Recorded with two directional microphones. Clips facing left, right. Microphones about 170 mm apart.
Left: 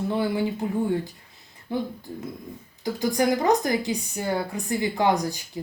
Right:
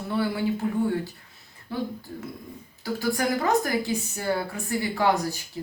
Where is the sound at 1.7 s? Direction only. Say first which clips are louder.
Left 2 dB; 20° left (ahead or behind).